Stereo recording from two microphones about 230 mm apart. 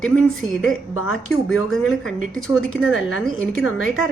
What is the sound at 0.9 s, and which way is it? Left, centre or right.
Speech, left.